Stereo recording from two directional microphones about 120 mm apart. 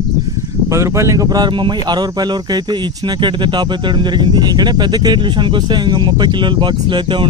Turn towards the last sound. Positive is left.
turn(degrees=-40)  # may be behind; listen again after turning